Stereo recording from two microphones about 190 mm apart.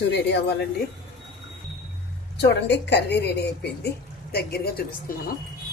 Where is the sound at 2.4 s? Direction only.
65° left (ahead or behind).